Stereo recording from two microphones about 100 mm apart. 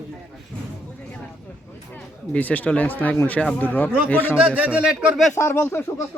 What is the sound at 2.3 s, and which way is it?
Speech, 15° left (ahead or behind).